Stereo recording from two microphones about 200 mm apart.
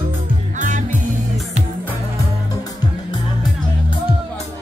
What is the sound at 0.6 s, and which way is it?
Music, 40° right (ahead or behind).